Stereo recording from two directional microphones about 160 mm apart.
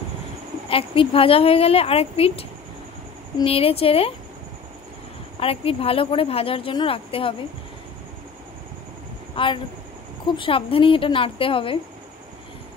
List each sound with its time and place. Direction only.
0.7 s speech: 35° left (ahead or behind)
3.4 s speech: 35° left (ahead or behind)
5.4 s speech: 35° left (ahead or behind)
9.3 s speech: 30° left (ahead or behind)